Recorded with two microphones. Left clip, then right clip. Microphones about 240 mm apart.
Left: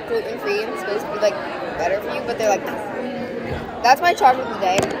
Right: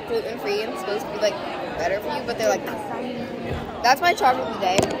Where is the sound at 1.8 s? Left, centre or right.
Centre.